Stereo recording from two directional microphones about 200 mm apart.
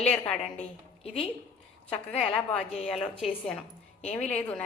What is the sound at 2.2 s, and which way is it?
Speech, 5° left (ahead or behind).